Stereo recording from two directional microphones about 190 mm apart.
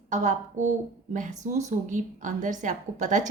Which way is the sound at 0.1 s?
40° right (ahead or behind).